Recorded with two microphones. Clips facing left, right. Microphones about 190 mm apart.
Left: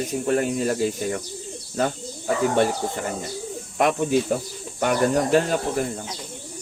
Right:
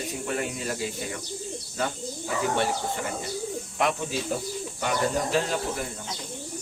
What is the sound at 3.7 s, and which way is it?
Speech, 50° left (ahead or behind).